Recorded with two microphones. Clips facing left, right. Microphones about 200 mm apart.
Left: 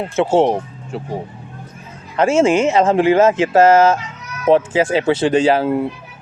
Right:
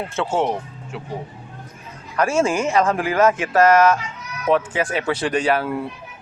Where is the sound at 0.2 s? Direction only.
30° left (ahead or behind).